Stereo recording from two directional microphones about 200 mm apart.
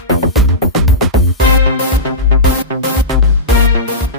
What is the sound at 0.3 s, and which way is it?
Music, centre (ahead or behind).